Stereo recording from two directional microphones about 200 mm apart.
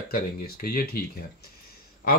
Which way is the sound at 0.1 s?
45° left (ahead or behind).